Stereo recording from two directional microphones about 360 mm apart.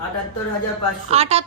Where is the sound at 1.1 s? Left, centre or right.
Centre.